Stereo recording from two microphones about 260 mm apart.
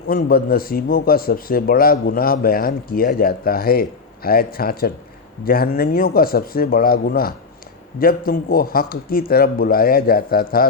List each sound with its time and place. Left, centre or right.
0.1 s a man's voice: left